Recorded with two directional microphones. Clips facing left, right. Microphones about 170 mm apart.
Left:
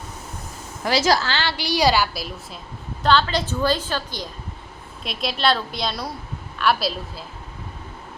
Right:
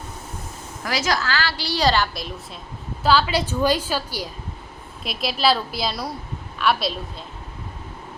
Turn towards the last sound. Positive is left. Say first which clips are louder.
# even
turn(degrees=0)  # may be behind; listen again after turning